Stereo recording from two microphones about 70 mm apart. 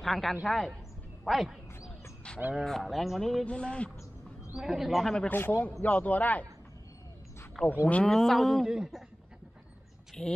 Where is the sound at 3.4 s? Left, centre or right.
Centre.